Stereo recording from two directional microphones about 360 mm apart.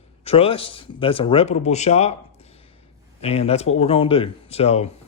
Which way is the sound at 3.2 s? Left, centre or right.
Centre.